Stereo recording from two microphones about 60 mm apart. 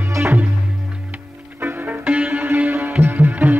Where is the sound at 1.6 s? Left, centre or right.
Right.